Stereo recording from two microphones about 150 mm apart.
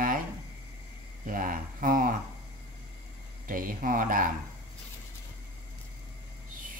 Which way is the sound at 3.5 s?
65° right (ahead or behind).